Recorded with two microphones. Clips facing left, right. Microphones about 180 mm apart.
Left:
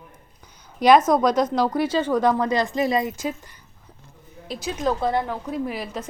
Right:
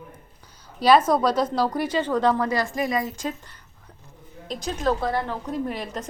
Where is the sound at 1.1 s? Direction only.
15° left (ahead or behind).